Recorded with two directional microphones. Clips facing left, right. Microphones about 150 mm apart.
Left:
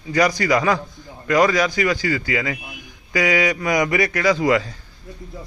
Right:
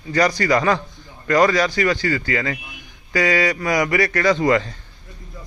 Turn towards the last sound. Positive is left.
turn(degrees=5)  # may be behind; listen again after turning